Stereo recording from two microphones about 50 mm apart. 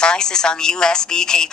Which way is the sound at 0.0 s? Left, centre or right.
Centre.